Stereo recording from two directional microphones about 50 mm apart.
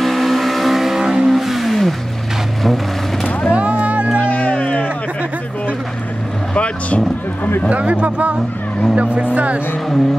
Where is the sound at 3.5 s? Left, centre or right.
Right.